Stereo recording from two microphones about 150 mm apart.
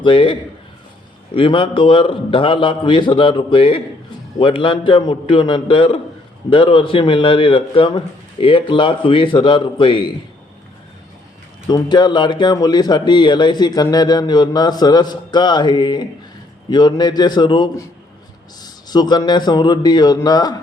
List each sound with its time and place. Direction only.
0.0 s speech: 35° left (ahead or behind)
11.7 s a man's voice: 30° left (ahead or behind)